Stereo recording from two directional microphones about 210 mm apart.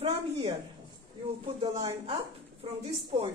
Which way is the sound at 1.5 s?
25° right (ahead or behind).